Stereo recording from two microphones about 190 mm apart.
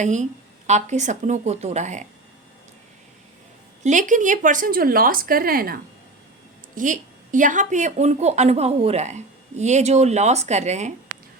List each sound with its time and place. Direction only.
0.0 s a woman's voice: 40° right (ahead or behind)
3.8 s a woman's voice: 40° right (ahead or behind)